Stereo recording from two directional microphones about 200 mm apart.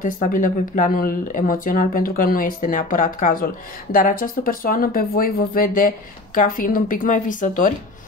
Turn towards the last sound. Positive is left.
turn(degrees=40)  # may be behind; listen again after turning